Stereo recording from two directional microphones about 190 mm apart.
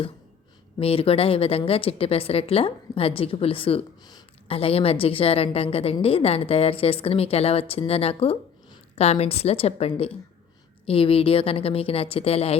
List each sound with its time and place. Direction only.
0.8 s a woman's voice: 30° left (ahead or behind)